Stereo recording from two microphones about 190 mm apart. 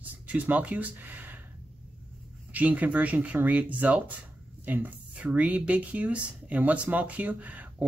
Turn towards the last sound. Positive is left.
turn(degrees=-10)  # may be behind; listen again after turning